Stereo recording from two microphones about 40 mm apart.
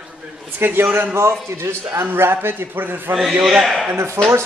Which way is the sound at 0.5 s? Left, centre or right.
Right.